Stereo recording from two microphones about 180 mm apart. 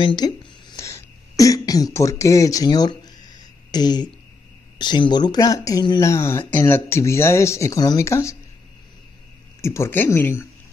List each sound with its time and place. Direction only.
0.0 s throat clearing: 25° left (ahead or behind)
4.7 s speech: 25° left (ahead or behind)
9.6 s speech: 15° left (ahead or behind)